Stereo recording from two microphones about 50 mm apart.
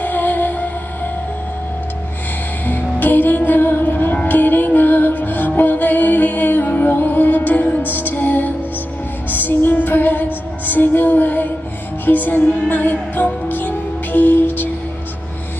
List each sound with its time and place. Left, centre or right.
0.0 s music: left
2.6 s music: left